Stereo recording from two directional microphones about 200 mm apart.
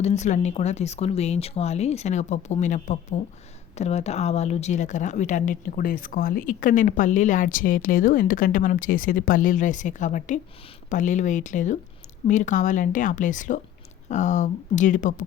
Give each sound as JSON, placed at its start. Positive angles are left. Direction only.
{"t": 0.0, "sound": "speech", "side_deg": 35}